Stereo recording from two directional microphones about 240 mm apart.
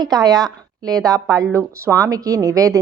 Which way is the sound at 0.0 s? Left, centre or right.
Centre.